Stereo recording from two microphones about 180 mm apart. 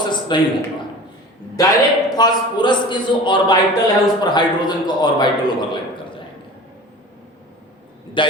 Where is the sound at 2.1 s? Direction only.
25° left (ahead or behind).